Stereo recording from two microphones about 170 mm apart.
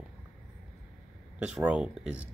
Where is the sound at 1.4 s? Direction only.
5° right (ahead or behind).